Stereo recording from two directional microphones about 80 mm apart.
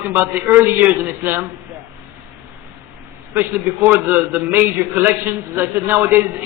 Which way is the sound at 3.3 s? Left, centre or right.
Right.